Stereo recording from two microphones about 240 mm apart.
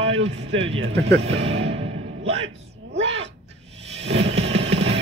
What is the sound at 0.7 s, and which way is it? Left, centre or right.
Speech, right.